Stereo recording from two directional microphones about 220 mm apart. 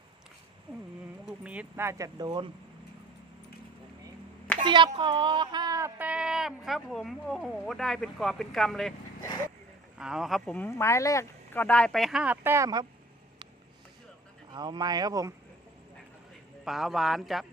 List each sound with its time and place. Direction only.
1.2 s speech: 5° right (ahead or behind)
4.6 s speech: 20° right (ahead or behind); by 8.9 s centre (ahead or behind)
10.0 s speech: centre (ahead or behind)
14.5 s speech: 20° right (ahead or behind)
16.6 s speech: centre (ahead or behind)